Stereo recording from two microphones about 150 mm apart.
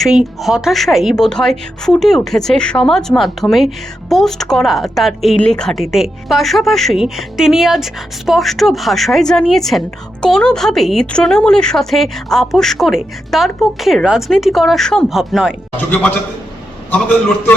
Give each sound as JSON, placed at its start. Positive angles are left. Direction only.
{"t": 0.0, "sound": "a woman's voice", "side_deg": 0}
{"t": 15.9, "sound": "a man's voice", "side_deg": 10}